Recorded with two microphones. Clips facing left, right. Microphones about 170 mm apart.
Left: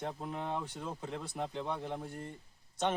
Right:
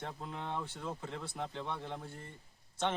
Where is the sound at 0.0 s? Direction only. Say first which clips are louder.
Left 4 dB; 15° left (ahead or behind).